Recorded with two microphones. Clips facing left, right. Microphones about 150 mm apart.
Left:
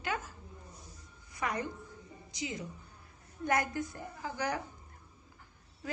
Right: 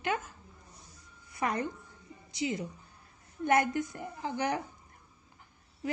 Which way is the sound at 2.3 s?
30° right (ahead or behind).